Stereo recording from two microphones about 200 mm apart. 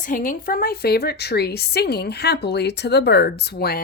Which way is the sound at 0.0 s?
45° left (ahead or behind).